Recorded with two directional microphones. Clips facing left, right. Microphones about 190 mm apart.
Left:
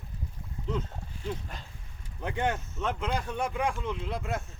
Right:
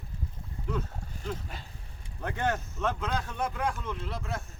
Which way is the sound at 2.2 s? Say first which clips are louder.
Even; 15° left (ahead or behind).